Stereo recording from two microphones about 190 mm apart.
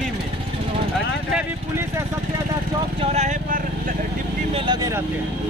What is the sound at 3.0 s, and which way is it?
Speech, 35° right (ahead or behind).